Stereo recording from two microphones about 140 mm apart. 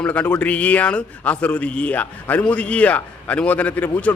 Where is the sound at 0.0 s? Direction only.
10° left (ahead or behind).